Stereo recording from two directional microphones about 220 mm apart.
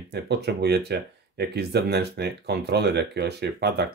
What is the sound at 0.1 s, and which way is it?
Speech, 50° right (ahead or behind).